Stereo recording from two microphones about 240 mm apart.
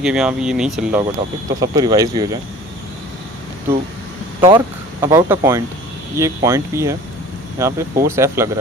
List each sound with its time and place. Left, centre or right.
0.0 s speech: centre
1.5 s speech: centre
4.4 s speech: centre